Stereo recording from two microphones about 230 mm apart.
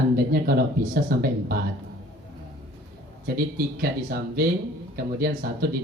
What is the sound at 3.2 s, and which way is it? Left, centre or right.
Speech, right.